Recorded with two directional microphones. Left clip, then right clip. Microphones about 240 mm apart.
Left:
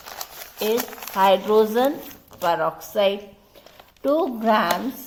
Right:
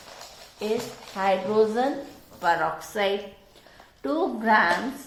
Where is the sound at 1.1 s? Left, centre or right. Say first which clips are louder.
Left 7 dB; left.